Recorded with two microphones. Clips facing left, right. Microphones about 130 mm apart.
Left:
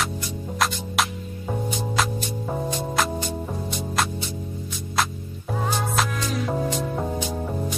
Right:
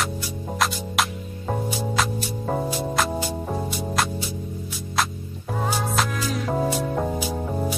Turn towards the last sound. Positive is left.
turn(degrees=-10)  # may be behind; listen again after turning